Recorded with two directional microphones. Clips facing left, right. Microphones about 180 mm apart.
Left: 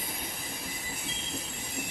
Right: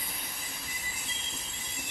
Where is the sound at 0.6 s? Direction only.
55° left (ahead or behind).